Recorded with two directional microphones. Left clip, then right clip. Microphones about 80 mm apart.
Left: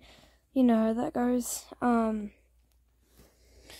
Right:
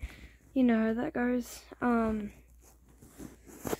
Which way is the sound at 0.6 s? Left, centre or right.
Left.